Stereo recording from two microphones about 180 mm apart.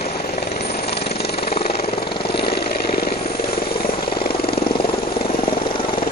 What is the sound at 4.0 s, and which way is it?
Vehicle, 25° left (ahead or behind).